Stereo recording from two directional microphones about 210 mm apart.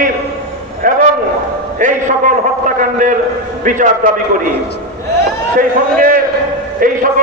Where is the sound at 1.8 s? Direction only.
40° right (ahead or behind).